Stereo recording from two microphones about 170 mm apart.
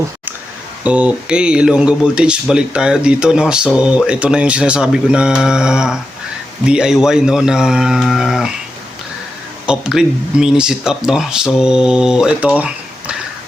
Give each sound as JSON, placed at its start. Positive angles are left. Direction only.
{"t": 0.9, "sound": "speech", "side_deg": -5}
{"t": 9.6, "sound": "speech", "side_deg": -5}